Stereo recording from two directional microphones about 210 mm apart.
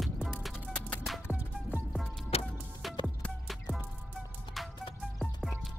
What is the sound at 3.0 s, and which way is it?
Music, centre (ahead or behind).